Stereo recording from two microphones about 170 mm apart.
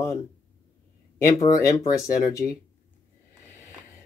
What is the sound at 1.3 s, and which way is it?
Speech, 20° left (ahead or behind).